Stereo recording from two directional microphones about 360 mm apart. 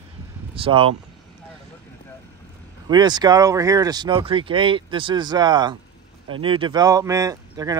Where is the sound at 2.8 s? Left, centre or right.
Centre.